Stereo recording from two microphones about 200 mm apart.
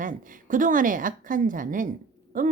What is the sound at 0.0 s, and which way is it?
Speech, 40° right (ahead or behind).